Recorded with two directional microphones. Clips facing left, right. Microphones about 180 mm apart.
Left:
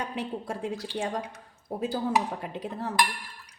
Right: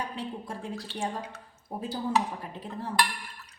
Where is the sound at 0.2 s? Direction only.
80° left.